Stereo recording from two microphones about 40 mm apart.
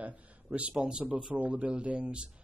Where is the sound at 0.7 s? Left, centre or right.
Centre.